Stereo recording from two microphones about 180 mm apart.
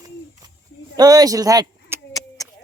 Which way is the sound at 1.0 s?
20° right (ahead or behind).